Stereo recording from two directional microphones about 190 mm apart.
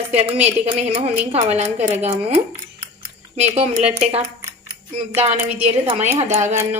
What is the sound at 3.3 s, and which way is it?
Speech, 35° right (ahead or behind).